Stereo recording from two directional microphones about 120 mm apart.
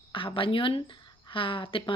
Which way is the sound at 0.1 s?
45° left (ahead or behind).